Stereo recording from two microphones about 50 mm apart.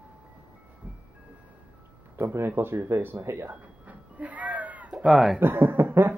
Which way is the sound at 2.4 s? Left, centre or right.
Right.